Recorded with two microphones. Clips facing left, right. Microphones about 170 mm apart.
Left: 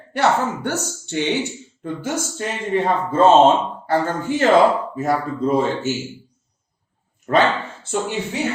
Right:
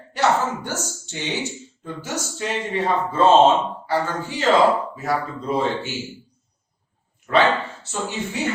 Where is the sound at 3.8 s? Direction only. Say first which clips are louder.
Left 4 dB; 50° left (ahead or behind).